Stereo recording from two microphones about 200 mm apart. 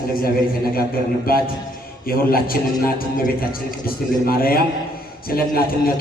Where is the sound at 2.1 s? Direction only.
50° left (ahead or behind).